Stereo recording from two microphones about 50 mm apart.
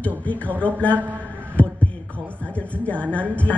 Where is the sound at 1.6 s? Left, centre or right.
Left.